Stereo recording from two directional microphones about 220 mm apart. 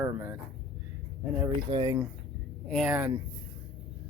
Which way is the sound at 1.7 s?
20° right (ahead or behind).